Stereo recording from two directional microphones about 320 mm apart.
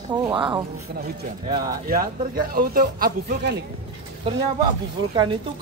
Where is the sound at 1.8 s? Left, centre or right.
Right.